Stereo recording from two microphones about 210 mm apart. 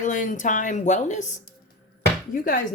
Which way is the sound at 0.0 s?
40° left (ahead or behind).